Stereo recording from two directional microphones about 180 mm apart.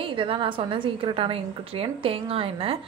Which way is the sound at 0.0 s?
30° right (ahead or behind).